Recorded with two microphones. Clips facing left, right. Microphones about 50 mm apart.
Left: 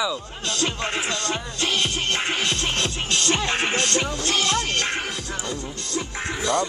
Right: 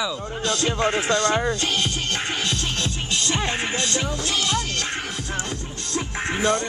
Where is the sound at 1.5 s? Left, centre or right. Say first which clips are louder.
Left 1 dB; left.